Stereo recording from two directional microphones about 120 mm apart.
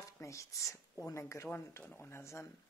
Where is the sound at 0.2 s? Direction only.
25° left (ahead or behind).